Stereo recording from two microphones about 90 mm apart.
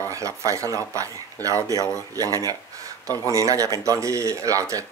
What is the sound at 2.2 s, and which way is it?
Speech, 40° right (ahead or behind).